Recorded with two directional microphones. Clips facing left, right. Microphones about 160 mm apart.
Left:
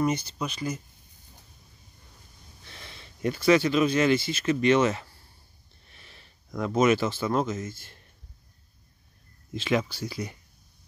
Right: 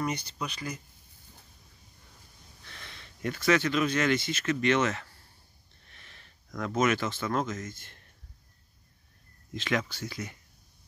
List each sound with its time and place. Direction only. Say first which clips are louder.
0.0 s speech: left 6 dB; 25° left (ahead or behind)
3.0 s a sound: left 5 dB; 25° left (ahead or behind)
3.3 s speech: left 5 dB; 10° left (ahead or behind)
5.9 s sniff: left 2 dB; 10° left (ahead or behind)
6.7 s speech: left 5 dB; 30° left (ahead or behind)
7.0 s speech: left 4 dB; 10° left (ahead or behind)
9.8 s speech: left 4 dB; 10° left (ahead or behind)